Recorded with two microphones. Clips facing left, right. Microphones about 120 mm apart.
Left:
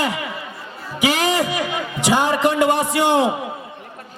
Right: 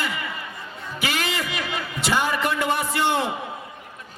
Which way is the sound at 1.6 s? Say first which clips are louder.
Left 5 dB; 15° left (ahead or behind).